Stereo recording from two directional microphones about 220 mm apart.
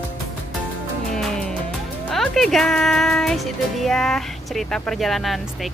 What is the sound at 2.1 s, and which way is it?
Speech, centre (ahead or behind).